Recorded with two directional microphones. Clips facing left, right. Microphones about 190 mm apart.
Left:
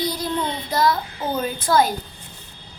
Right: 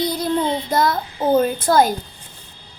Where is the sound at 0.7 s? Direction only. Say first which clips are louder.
Left 2 dB; 50° right (ahead or behind).